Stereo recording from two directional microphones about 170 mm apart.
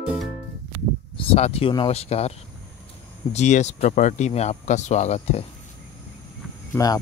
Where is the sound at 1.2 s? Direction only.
35° left (ahead or behind).